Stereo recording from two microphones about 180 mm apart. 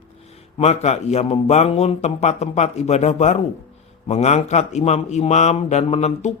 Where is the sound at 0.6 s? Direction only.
35° left (ahead or behind).